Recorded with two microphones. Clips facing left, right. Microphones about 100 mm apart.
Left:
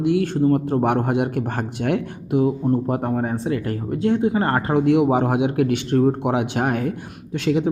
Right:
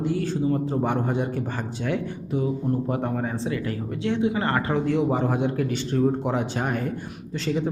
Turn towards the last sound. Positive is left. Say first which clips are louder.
# left 6 dB
turn(degrees=65)  # may be behind; listen again after turning